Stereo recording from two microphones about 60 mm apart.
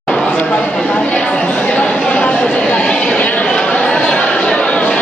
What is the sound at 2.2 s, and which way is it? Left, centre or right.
Chatter, centre.